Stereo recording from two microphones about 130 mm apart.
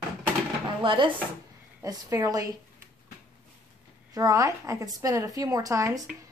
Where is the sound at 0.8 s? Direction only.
40° right (ahead or behind).